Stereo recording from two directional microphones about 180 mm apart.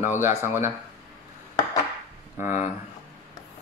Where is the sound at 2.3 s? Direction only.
45° left (ahead or behind).